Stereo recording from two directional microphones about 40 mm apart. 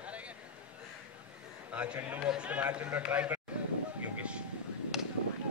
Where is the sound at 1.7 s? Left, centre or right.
Right.